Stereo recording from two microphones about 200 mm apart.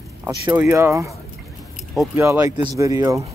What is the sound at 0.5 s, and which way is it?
Speech, 10° right (ahead or behind).